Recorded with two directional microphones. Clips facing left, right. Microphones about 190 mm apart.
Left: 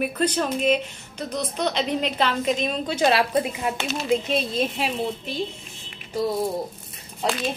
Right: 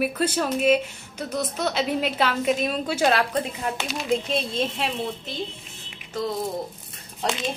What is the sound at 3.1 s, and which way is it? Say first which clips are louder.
A woman's voice: left 2 dB; 10° left (ahead or behind).